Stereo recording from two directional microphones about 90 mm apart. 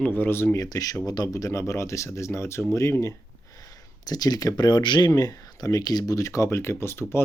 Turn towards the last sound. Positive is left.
turn(degrees=30)  # may be behind; listen again after turning